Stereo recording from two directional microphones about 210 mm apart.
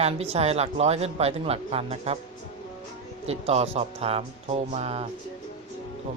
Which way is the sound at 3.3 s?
30° right (ahead or behind).